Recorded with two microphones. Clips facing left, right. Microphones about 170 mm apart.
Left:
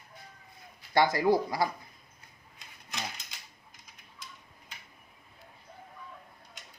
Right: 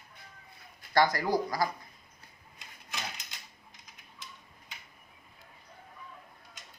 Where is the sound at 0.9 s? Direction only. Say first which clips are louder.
Left 2 dB; 20° left (ahead or behind).